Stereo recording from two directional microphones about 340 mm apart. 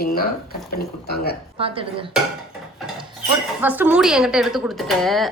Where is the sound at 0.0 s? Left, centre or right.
Left.